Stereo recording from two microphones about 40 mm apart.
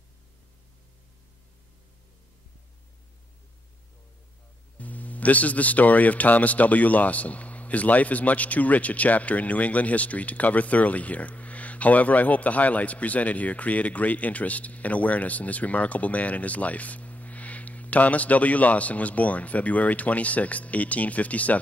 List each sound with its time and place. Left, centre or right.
4.7 s a man's voice: left